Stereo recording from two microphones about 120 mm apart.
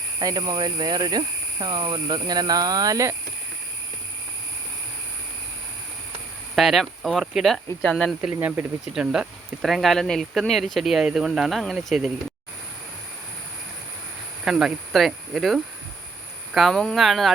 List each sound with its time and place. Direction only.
0.2 s speech: 35° right (ahead or behind)
6.6 s speech: centre (ahead or behind)
8.2 s speech: 15° right (ahead or behind)
8.9 s speech: 5° right (ahead or behind)
14.4 s speech: 5° right (ahead or behind)